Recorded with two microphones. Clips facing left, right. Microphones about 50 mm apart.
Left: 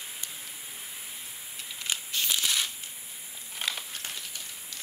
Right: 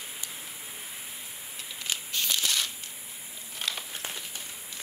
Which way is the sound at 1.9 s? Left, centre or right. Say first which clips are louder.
Even; centre.